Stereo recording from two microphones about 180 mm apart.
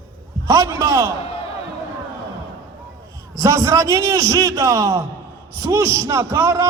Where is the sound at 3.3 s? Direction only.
20° right (ahead or behind).